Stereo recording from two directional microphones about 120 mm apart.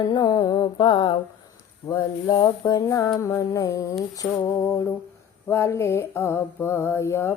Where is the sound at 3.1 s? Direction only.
25° left (ahead or behind).